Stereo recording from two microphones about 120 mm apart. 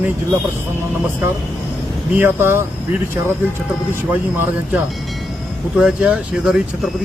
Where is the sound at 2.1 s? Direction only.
20° right (ahead or behind).